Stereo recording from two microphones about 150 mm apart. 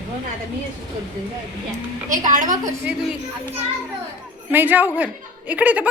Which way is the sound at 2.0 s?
60° right (ahead or behind).